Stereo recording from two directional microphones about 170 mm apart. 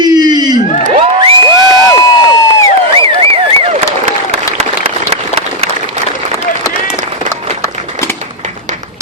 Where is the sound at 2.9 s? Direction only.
30° right (ahead or behind).